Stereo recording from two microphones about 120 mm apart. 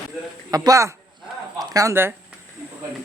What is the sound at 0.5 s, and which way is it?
A man's voice, 30° right (ahead or behind).